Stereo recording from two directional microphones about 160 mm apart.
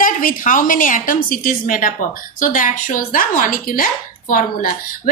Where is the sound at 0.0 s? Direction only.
60° left (ahead or behind).